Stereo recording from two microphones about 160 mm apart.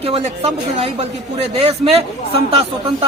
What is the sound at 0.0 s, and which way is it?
Speech, 40° right (ahead or behind).